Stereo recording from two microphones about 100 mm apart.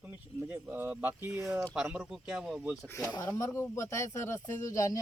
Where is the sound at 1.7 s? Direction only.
10° right (ahead or behind).